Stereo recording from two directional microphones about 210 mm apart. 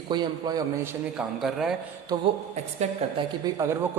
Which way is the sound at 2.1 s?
20° right (ahead or behind).